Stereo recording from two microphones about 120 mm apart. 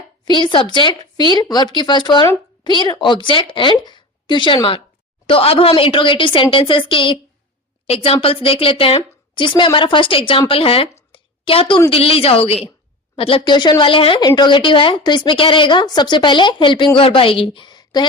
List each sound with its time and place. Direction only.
0.3 s a woman's voice: 40° left (ahead or behind)
7.9 s a woman's voice: 55° left (ahead or behind)
11.1 s a sound: 45° left (ahead or behind)
11.9 s a woman's voice: 50° left (ahead or behind); by 18.0 s 35° left (ahead or behind)